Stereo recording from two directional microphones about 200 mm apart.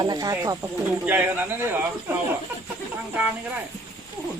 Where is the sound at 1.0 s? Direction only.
10° right (ahead or behind).